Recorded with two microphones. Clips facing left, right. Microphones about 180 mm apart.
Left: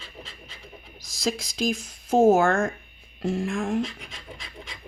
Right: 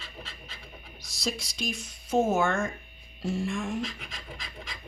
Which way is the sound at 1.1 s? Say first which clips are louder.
Left 5 dB; 90° left.